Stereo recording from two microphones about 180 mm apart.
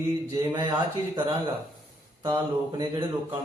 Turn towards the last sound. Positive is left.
turn(degrees=-25)  # may be behind; listen again after turning